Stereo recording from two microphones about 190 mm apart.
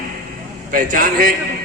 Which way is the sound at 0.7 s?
50° right (ahead or behind).